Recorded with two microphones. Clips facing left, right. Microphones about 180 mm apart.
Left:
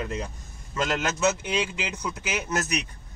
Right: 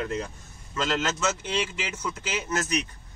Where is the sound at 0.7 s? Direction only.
10° left (ahead or behind).